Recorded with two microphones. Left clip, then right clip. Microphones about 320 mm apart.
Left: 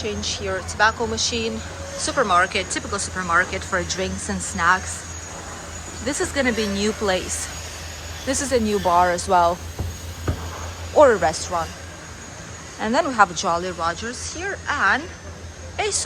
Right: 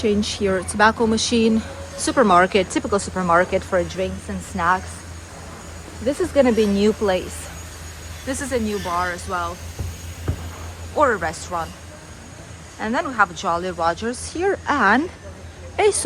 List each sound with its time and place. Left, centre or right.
0.0 s speech: right
6.1 s speech: centre
8.3 s speech: centre
10.9 s speech: centre
12.8 s speech: centre